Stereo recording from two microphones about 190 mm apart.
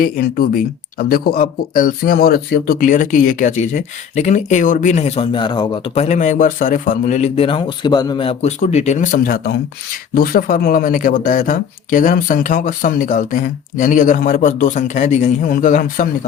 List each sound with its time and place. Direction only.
0.0 s speech: 50° left (ahead or behind)